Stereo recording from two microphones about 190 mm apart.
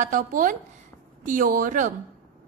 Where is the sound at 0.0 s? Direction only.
45° right (ahead or behind).